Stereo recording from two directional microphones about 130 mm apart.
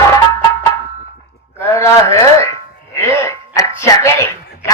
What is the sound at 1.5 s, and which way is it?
Speech, 20° left (ahead or behind).